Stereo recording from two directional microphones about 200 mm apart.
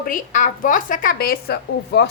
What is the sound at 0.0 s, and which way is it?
A woman's voice, 40° left (ahead or behind).